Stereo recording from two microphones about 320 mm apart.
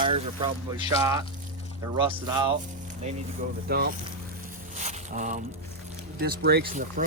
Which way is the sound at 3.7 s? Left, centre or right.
Right.